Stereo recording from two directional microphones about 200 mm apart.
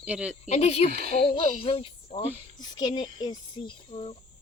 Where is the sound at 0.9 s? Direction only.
50° right (ahead or behind).